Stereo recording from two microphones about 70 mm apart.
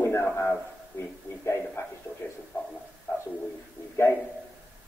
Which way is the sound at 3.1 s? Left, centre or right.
Left.